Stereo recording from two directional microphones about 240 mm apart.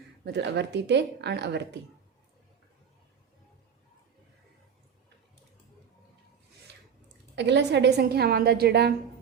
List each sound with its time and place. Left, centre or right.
0.3 s speech: right
7.3 s a woman's voice: right